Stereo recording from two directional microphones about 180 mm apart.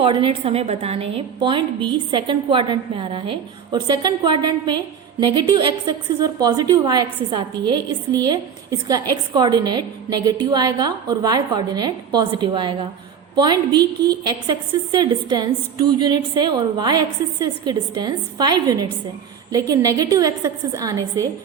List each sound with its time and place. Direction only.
0.0 s a woman's voice: 30° right (ahead or behind)